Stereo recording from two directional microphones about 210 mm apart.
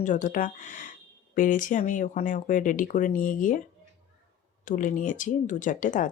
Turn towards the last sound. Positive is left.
turn(degrees=40)  # may be behind; listen again after turning